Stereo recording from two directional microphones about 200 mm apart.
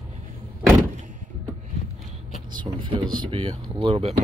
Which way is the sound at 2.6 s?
25° right (ahead or behind).